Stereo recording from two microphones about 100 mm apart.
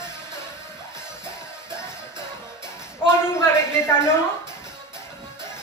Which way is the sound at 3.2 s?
25° left (ahead or behind).